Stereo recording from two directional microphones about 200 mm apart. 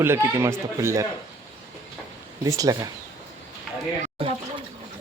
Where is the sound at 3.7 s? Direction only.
Centre (ahead or behind).